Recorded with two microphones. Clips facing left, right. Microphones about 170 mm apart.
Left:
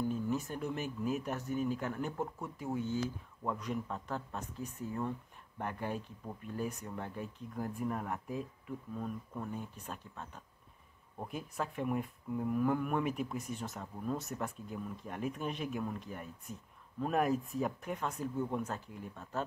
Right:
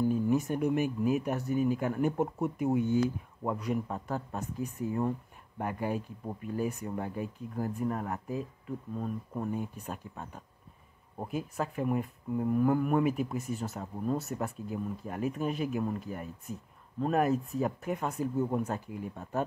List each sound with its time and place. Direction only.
0.0 s speech: 10° right (ahead or behind)
2.2 s speech: 30° right (ahead or behind)
2.6 s speech: 15° right (ahead or behind)
8.9 s speech: 25° right (ahead or behind)
9.5 s speech: 10° right (ahead or behind)